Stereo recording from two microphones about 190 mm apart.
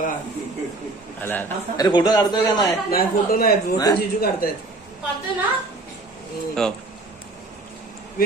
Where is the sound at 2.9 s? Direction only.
50° left (ahead or behind).